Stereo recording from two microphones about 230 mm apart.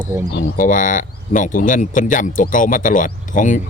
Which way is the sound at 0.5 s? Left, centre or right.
Left.